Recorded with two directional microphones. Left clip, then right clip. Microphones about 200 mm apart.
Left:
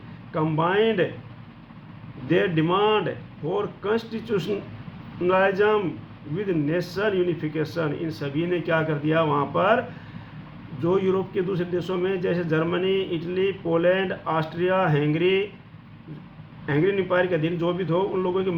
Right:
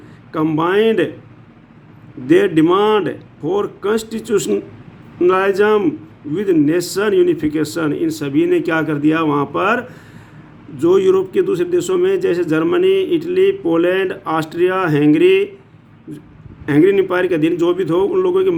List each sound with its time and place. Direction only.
0.3 s a man's voice: 55° right (ahead or behind)
2.3 s a man's voice: 55° right (ahead or behind)
16.6 s a man's voice: 55° right (ahead or behind)